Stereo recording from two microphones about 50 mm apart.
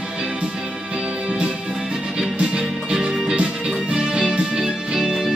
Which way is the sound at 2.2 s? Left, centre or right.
Centre.